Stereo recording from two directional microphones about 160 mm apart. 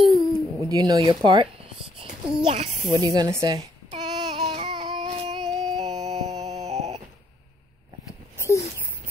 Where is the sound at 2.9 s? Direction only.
25° right (ahead or behind).